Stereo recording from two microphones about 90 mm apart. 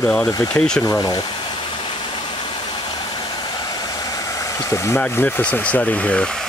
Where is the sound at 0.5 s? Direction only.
5° left (ahead or behind).